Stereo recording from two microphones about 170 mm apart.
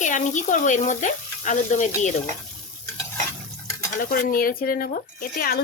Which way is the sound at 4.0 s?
60° left (ahead or behind).